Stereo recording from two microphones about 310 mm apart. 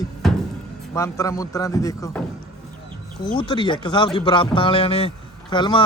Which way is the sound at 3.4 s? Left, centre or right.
Centre.